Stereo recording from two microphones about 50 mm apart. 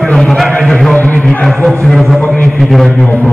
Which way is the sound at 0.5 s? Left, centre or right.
Centre.